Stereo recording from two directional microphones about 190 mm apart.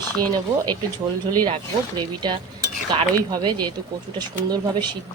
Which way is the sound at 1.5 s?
25° right (ahead or behind).